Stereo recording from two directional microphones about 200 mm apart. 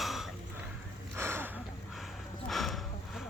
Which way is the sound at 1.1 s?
10° right (ahead or behind).